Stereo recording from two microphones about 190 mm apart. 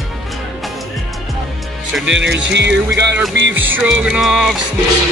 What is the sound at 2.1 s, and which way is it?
Speech, 70° right (ahead or behind).